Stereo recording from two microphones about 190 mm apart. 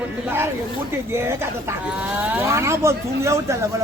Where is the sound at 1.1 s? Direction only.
15° right (ahead or behind).